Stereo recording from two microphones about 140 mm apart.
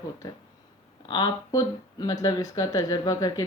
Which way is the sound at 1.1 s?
30° left (ahead or behind).